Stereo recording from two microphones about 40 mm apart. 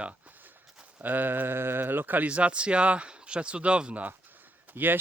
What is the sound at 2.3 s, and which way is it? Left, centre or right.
Speech, right.